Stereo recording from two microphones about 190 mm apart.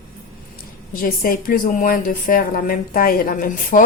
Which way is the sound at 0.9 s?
50° left (ahead or behind).